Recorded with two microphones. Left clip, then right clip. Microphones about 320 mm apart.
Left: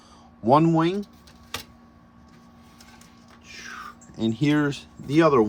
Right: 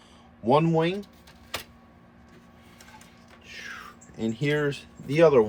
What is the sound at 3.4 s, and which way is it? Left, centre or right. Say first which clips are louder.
Whispering: even; centre.